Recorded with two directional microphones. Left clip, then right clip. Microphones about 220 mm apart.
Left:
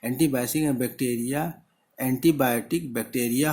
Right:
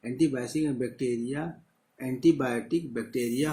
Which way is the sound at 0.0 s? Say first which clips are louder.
Left 3 dB; 50° left (ahead or behind).